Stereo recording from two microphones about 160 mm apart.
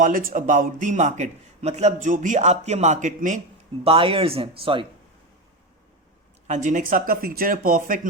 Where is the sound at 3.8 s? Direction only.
35° right (ahead or behind).